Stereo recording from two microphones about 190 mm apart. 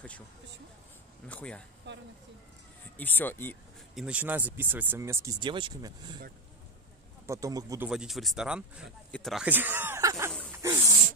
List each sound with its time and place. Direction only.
1.2 s speech: 5° left (ahead or behind)
1.9 s speech: 65° right (ahead or behind)
3.0 s speech: 10° left (ahead or behind)
3.9 s speech: 5° right (ahead or behind); by 6.1 s 20° right (ahead or behind)
7.2 s speech: 15° right (ahead or behind)
7.9 s speech: centre (ahead or behind)
10.5 s a sound: 10° right (ahead or behind)